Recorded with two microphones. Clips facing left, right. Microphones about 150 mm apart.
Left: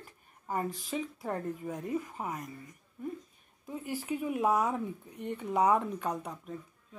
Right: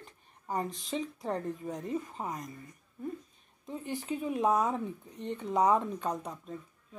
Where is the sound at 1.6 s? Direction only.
10° left (ahead or behind).